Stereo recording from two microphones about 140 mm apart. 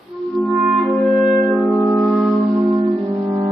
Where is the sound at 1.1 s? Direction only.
5° left (ahead or behind).